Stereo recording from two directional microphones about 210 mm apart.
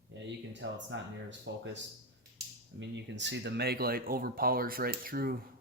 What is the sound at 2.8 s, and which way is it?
Speech, 55° right (ahead or behind).